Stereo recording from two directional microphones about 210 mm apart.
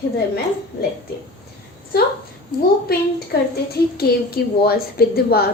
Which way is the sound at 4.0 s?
45° left (ahead or behind).